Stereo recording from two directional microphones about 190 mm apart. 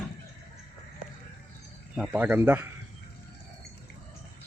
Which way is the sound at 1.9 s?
10° right (ahead or behind).